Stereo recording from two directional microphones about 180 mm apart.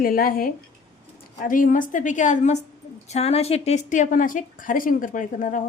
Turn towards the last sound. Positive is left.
turn(degrees=45)  # may be behind; listen again after turning